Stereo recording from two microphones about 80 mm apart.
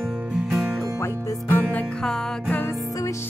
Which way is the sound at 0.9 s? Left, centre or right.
Left.